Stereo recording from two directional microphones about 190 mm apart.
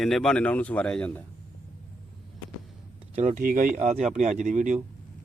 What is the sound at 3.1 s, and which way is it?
A man's voice, 40° right (ahead or behind).